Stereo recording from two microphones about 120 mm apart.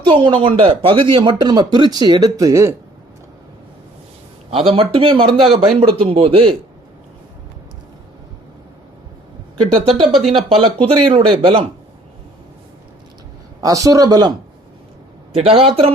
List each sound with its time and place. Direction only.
0.0 s speech: 45° right (ahead or behind); by 2.7 s 25° right (ahead or behind)
4.7 s speech: 50° right (ahead or behind)
9.9 s speech: centre (ahead or behind)
10.5 s speech: 50° right (ahead or behind)
13.6 s speech: 30° right (ahead or behind)
15.4 s speech: 55° right (ahead or behind)